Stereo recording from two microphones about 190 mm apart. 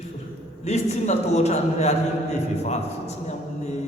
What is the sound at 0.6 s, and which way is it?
Speech, 35° left (ahead or behind).